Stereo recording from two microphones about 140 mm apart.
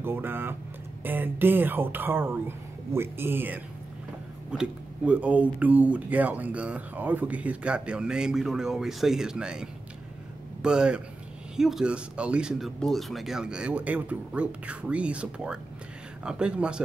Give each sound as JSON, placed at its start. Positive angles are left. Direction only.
{"t": 0.0, "sound": "vehicle", "side_deg": -15}
{"t": 1.0, "sound": "speech", "side_deg": -15}